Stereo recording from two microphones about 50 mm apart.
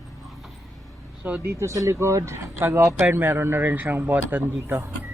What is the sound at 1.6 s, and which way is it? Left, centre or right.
Speech, right.